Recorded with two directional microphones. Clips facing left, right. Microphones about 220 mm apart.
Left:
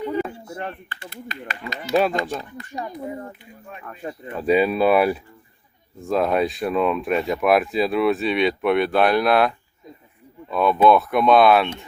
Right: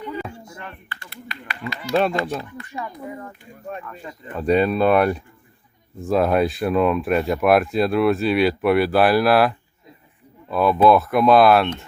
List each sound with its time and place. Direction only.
1.0 s speech: 45° left (ahead or behind)
1.9 s speech: 5° left (ahead or behind)
2.6 s speech: 40° left (ahead or behind)
4.0 s speech: 45° left (ahead or behind)
4.4 s speech: 5° left (ahead or behind)